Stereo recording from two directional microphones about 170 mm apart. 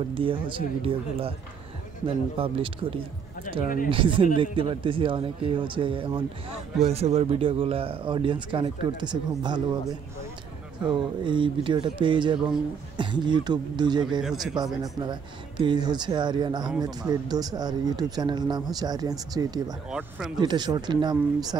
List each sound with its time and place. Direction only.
0.1 s a man's voice: 30° right (ahead or behind)
3.6 s speech: 55° left (ahead or behind)
3.9 s a man's voice: 30° right (ahead or behind)
14.2 s speech: centre (ahead or behind)
14.8 s speech: 25° right (ahead or behind)
19.9 s speech: 5° right (ahead or behind)
20.3 s speech: 25° right (ahead or behind)